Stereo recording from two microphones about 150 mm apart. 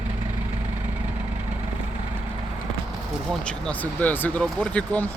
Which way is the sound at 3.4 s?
10° left (ahead or behind).